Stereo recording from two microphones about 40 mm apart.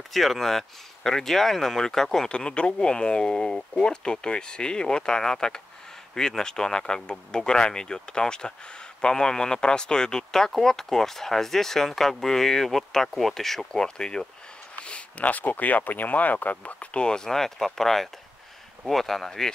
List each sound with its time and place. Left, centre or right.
0.1 s speech: centre
2.3 s speech: left; by 13.7 s centre
13.7 s speech: centre
14.9 s speech: left
16.9 s speech: left